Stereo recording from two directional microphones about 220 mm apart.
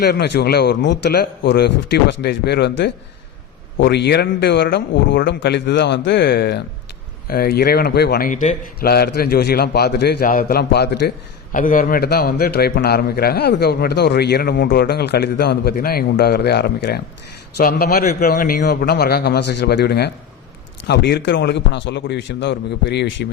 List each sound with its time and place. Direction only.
0.0 s a man's voice: 45° left (ahead or behind)